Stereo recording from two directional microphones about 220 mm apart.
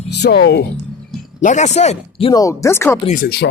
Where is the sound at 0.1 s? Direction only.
50° left (ahead or behind).